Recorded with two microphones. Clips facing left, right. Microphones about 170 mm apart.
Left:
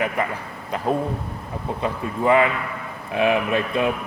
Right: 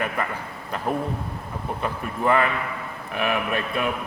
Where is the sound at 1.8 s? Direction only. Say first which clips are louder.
Left 3 dB; 20° left (ahead or behind).